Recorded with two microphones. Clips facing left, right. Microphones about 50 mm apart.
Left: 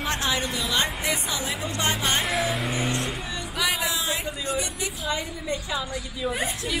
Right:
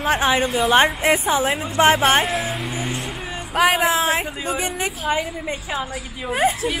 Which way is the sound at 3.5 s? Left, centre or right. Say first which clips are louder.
Right 10 dB; right.